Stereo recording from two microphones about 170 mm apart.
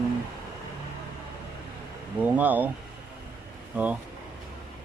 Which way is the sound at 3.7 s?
10° right (ahead or behind).